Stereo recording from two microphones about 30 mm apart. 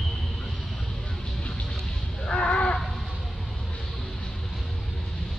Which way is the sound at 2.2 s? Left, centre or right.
Left.